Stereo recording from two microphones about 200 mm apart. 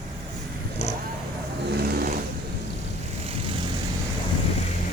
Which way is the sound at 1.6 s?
50° right (ahead or behind).